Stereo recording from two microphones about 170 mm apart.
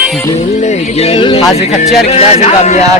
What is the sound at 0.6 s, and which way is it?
Speech, 40° left (ahead or behind).